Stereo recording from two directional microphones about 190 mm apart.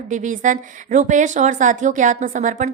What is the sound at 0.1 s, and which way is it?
A woman's voice, 40° right (ahead or behind).